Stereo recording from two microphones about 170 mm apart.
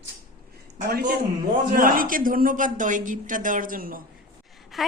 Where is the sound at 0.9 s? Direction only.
65° right (ahead or behind).